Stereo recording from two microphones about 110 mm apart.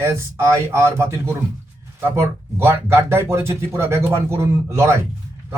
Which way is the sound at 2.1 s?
25° right (ahead or behind).